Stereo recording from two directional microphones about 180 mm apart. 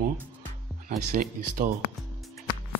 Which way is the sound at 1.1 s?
50° right (ahead or behind).